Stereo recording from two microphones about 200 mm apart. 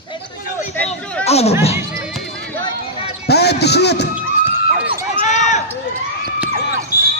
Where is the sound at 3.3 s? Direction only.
55° left (ahead or behind).